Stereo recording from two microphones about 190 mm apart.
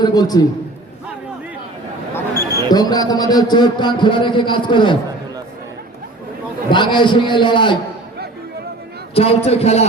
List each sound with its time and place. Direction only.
0.0 s a man's voice: 20° left (ahead or behind)
2.1 s basketball bounce: 15° left (ahead or behind)
2.6 s a man's voice: 20° left (ahead or behind)
6.7 s a man's voice: 25° left (ahead or behind)
9.1 s a man's voice: 30° left (ahead or behind)